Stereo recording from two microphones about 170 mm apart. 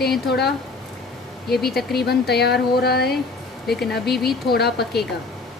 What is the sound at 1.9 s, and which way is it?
Speech, 70° left (ahead or behind).